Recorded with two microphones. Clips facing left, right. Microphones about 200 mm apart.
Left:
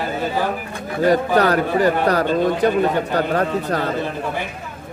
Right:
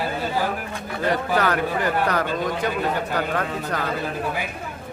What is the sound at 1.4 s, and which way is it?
A man's voice, 35° left (ahead or behind).